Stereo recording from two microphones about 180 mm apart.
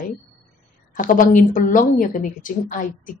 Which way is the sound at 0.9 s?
45° left (ahead or behind).